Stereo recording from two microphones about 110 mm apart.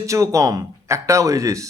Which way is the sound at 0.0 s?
30° right (ahead or behind).